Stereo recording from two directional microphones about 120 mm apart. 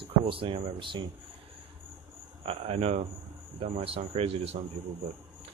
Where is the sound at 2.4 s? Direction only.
55° right (ahead or behind).